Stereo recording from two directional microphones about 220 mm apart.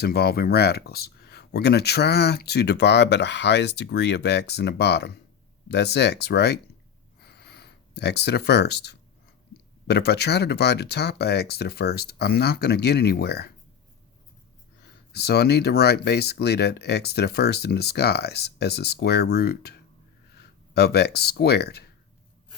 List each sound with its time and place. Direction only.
0.0 s speech: 45° left (ahead or behind)
7.2 s a sound: 50° left (ahead or behind)
9.8 s speech: 50° left (ahead or behind)
15.1 s speech: 45° left (ahead or behind)